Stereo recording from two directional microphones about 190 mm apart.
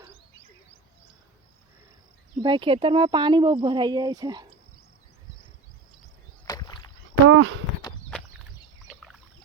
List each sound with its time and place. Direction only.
2.4 s speech: 25° right (ahead or behind)
6.5 s rowboat: 20° left (ahead or behind)
7.3 s a sound: 90° right